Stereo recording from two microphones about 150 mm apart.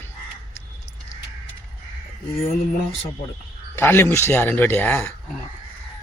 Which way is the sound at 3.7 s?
15° left (ahead or behind).